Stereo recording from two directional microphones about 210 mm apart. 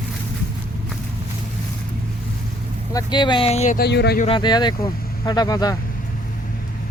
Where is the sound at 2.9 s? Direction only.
20° left (ahead or behind).